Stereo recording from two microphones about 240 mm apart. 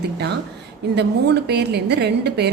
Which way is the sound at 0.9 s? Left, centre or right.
Right.